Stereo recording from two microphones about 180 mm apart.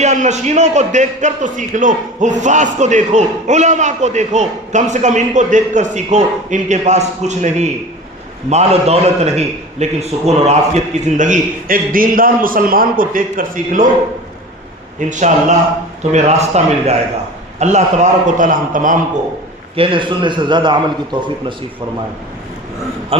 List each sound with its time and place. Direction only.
0.0 s a man's voice: 40° right (ahead or behind)
11.2 s a man's voice: 45° right (ahead or behind)
14.9 s a man's voice: 40° right (ahead or behind)
19.7 s a man's voice: 30° right (ahead or behind)